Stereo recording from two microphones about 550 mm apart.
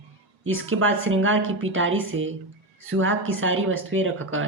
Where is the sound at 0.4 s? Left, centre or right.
Right.